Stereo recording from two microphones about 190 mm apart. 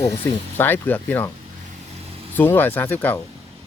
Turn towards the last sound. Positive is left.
turn(degrees=10)  # may be behind; listen again after turning